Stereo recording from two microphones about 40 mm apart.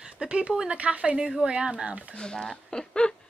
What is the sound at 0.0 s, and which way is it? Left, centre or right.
Speech, right.